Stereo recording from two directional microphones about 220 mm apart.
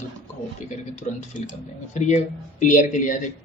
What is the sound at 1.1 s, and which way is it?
Speech, 35° left (ahead or behind).